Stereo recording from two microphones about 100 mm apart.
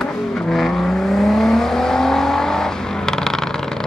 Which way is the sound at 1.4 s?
5° left (ahead or behind).